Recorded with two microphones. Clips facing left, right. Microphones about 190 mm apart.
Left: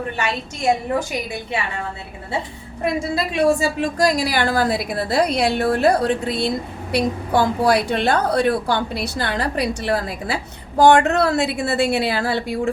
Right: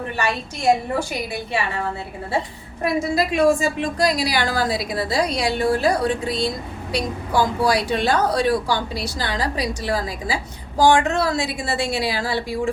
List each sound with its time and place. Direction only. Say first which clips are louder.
2.8 s a woman's voice: right 1 dB; 30° left (ahead or behind); by 12.7 s 55° left (ahead or behind)